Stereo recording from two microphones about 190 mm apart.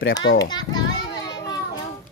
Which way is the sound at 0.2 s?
90° left.